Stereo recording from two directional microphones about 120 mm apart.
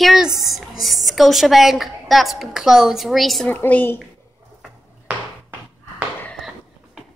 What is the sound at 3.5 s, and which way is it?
Speech, 15° left (ahead or behind).